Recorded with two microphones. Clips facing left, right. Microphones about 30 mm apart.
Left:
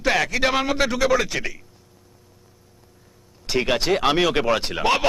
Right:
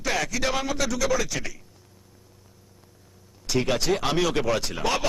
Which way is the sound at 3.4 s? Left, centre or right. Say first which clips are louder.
Left 3 dB; left.